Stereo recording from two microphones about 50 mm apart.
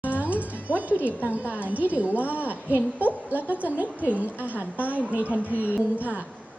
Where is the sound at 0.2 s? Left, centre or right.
Right.